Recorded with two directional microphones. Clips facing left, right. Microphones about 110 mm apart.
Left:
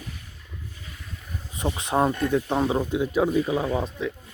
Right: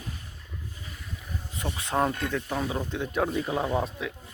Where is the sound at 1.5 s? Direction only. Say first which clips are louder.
Left 4 dB; 20° left (ahead or behind).